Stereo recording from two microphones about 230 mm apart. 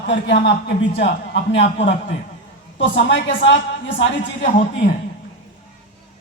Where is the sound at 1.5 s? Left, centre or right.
Left.